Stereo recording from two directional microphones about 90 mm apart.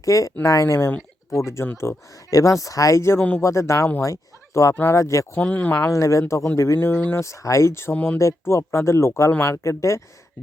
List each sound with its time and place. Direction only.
0.0 s speech: 40° left (ahead or behind)
4.7 s speech: 20° left (ahead or behind)
4.9 s speech: 35° left (ahead or behind)
5.4 s speech: 15° left (ahead or behind)
5.7 s speech: 35° left (ahead or behind)
6.7 s speech: 25° left (ahead or behind)
7.9 s speech: 15° left (ahead or behind)
8.2 s speech: 35° left (ahead or behind)